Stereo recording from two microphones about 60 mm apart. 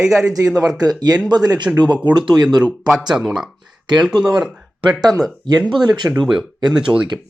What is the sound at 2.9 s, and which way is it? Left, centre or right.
Speech, centre.